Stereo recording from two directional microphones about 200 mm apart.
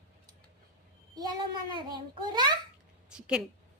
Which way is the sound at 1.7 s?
20° right (ahead or behind).